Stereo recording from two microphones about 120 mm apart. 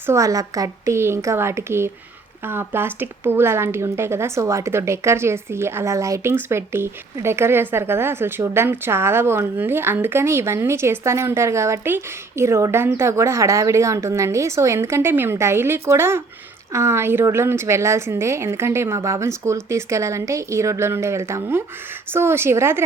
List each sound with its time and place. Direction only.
0.0 s speech: 25° right (ahead or behind)